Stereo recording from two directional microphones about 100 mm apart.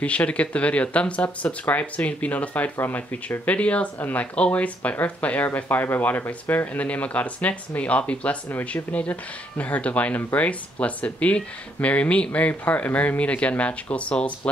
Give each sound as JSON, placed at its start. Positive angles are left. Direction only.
{"t": 0.0, "sound": "speech", "side_deg": 15}